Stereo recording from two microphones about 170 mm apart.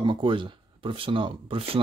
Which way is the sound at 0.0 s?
30° right (ahead or behind).